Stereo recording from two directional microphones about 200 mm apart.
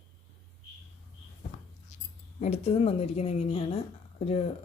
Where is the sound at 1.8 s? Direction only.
35° left (ahead or behind).